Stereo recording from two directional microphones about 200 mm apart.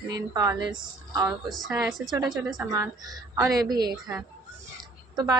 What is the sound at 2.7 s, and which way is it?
Speech, 15° right (ahead or behind).